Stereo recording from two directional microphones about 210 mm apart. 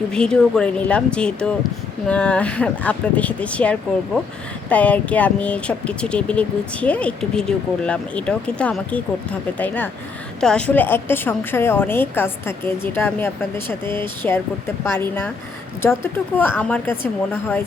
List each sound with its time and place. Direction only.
0.1 s a woman's voice: 5° left (ahead or behind)
16.4 s a woman's voice: 5° left (ahead or behind)